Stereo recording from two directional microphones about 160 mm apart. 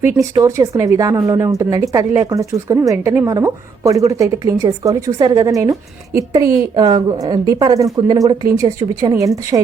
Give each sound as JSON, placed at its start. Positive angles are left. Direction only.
{"t": 0.0, "sound": "a woman's voice", "side_deg": -15}